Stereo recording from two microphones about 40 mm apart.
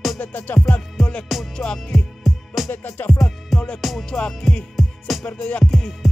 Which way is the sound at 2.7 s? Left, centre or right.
Left.